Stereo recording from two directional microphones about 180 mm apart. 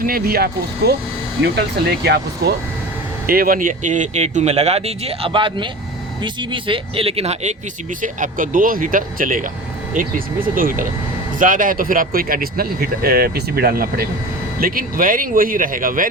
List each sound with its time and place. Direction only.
0.0 s speech: 55° right (ahead or behind)
2.0 s speech: 65° right (ahead or behind)
3.2 s speech: 50° right (ahead or behind); by 7.5 s 35° right (ahead or behind)
8.0 s speech: 45° right (ahead or behind)